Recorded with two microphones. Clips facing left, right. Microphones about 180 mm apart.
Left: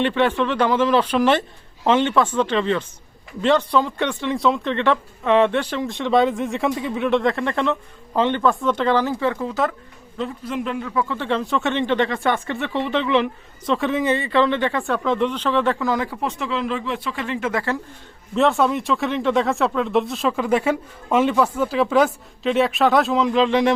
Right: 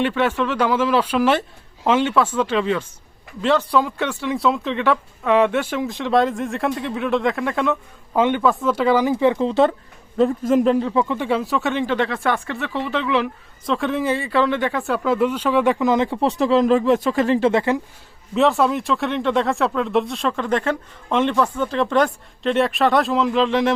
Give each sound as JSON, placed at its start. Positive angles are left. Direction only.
{"t": 0.0, "sound": "a man's voice", "side_deg": -5}
{"t": 10.2, "sound": "speech", "side_deg": -45}
{"t": 11.1, "sound": "speech", "side_deg": -10}
{"t": 16.2, "sound": "speech", "side_deg": -35}
{"t": 18.3, "sound": "speech", "side_deg": 0}